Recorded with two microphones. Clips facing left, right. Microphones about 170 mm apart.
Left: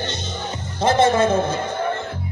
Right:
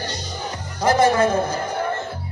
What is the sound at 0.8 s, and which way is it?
Music, 25° left (ahead or behind).